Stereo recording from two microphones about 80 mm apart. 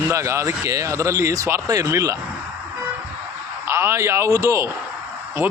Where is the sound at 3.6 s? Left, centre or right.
Right.